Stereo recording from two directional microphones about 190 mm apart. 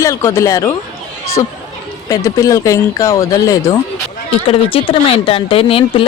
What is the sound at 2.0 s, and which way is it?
Speech, 15° left (ahead or behind).